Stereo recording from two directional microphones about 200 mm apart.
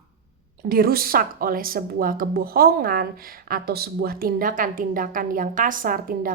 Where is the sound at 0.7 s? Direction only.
50° right (ahead or behind).